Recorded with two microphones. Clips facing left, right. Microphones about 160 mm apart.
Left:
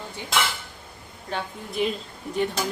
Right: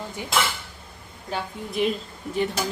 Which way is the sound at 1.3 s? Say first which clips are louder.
Right 1 dB; centre (ahead or behind).